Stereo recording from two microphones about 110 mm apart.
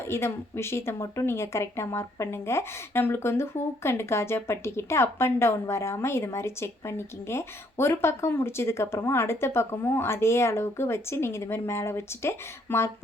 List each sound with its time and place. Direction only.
0.1 s a woman's voice: 25° left (ahead or behind)